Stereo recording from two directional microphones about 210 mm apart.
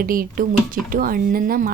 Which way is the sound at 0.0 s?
45° right (ahead or behind).